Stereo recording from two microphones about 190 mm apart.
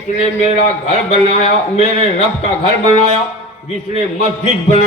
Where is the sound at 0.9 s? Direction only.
35° left (ahead or behind).